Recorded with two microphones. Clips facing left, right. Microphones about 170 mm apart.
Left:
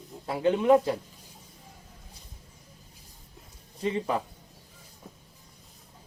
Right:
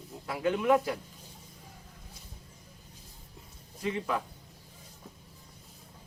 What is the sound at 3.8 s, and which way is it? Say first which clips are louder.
Speech: left 4 dB; 30° left (ahead or behind).